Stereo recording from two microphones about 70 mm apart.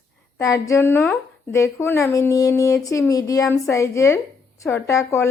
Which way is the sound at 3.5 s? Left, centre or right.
Left.